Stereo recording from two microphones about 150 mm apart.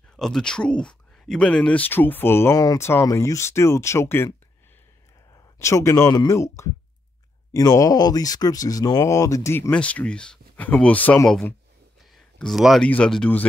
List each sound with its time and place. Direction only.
0.1 s speech: 5° left (ahead or behind)
5.3 s speech: 20° left (ahead or behind)